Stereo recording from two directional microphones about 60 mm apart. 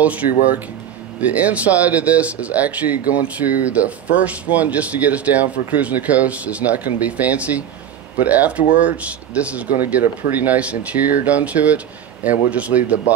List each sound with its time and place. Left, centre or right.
0.0 s speech: right